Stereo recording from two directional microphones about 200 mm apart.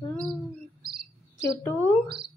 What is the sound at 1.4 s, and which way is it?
Mantra, 15° left (ahead or behind).